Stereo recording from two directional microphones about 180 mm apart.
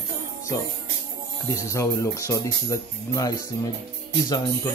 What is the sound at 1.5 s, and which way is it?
Speech, 15° left (ahead or behind).